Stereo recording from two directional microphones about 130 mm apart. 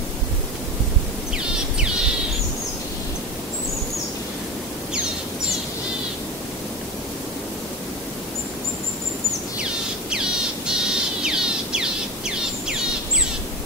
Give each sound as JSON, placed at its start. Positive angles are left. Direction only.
{"t": 10.7, "sound": "bird", "side_deg": -5}